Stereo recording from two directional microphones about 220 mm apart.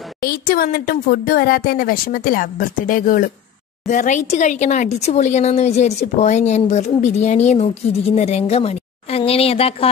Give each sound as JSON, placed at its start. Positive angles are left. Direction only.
{"t": 0.2, "sound": "speech", "side_deg": 45}